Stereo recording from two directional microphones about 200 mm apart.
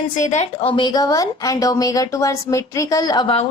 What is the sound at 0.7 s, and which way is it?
Speech, 25° left (ahead or behind).